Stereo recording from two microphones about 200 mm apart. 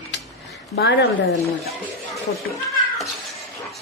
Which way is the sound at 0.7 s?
50° left (ahead or behind).